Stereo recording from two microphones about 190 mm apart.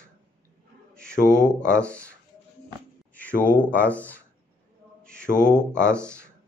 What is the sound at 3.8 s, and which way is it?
Speech, 10° left (ahead or behind).